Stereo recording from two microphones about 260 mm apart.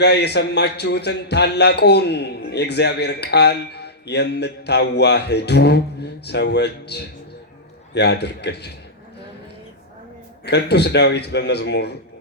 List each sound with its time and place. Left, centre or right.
0.0 s a man's voice: left
10.4 s a man's voice: left